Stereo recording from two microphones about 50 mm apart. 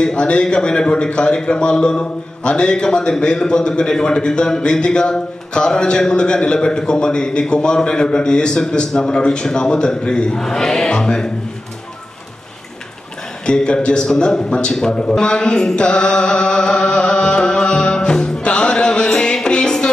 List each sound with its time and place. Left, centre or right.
0.0 s a man's voice: centre
13.5 s a man's voice: centre
15.0 s mantra: centre